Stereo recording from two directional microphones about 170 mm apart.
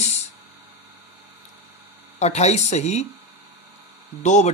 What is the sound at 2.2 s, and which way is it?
Speech, 40° left (ahead or behind).